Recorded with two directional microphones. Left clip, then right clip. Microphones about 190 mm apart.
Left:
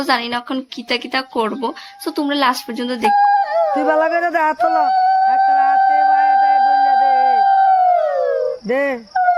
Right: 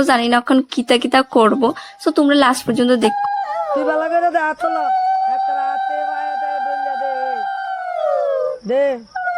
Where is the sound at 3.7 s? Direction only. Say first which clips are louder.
Left 2 dB; 35° left (ahead or behind).